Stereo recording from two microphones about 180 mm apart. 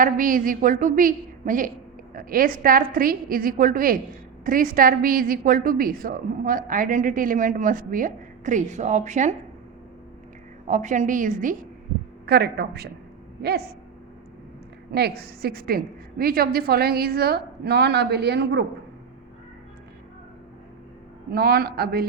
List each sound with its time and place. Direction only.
0.0 s a woman's voice: 50° right (ahead or behind)
10.7 s a woman's voice: 45° right (ahead or behind)
12.2 s a woman's voice: 60° right (ahead or behind)
14.9 s a woman's voice: 65° right (ahead or behind)
21.2 s a woman's voice: 60° right (ahead or behind)